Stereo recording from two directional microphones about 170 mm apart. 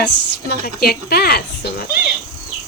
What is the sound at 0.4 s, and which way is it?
Speech, 70° left (ahead or behind).